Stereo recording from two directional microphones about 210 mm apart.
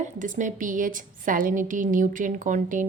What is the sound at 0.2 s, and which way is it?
A woman's voice, 40° right (ahead or behind).